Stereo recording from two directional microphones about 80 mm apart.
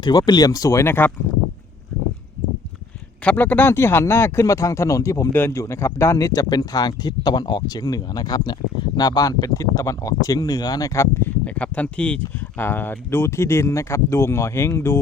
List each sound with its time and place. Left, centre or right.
0.0 s speech: left
3.2 s speech: left
11.4 s speech: centre; by 15.0 s left